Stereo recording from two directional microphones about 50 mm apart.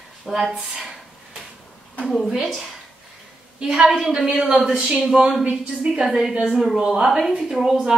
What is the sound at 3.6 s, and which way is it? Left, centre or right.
A woman's voice, centre.